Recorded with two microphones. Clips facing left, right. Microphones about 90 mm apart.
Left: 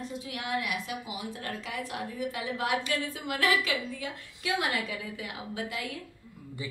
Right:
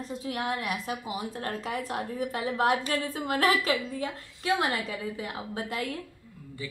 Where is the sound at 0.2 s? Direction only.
40° right (ahead or behind).